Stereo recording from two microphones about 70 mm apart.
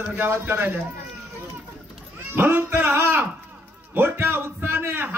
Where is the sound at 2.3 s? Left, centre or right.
Right.